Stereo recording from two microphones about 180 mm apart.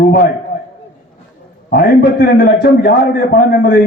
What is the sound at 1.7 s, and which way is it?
A man's voice, 60° left (ahead or behind).